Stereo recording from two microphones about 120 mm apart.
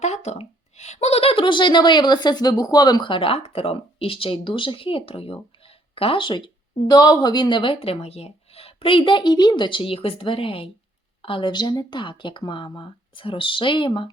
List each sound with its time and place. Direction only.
0.0 s a woman's voice: 70° left (ahead or behind); by 14.1 s 45° left (ahead or behind)